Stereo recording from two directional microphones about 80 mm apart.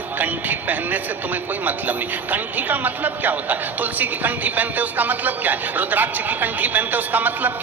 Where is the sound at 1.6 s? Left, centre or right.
Right.